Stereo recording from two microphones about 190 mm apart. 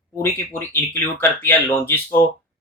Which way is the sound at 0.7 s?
10° left (ahead or behind).